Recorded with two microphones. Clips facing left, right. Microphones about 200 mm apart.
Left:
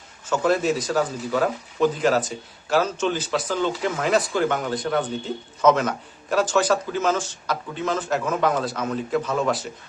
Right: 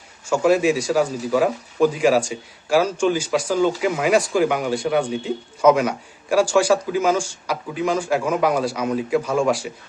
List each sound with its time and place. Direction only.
0.3 s speech: 10° right (ahead or behind)